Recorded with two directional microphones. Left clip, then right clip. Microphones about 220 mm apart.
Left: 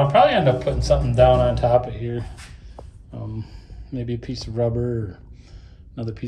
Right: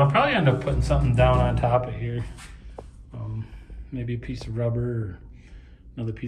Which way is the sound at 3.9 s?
15° left (ahead or behind).